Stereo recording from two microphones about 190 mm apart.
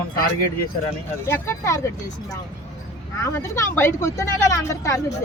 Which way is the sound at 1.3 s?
15° left (ahead or behind).